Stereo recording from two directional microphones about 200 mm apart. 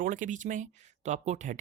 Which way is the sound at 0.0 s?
40° right (ahead or behind).